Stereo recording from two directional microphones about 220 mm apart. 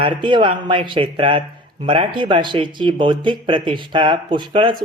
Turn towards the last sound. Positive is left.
turn(degrees=-20)  # may be behind; listen again after turning